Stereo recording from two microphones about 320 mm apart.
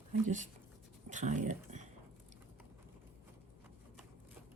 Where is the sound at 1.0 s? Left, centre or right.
Right.